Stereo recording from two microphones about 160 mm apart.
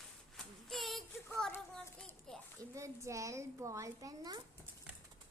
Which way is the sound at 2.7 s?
20° right (ahead or behind).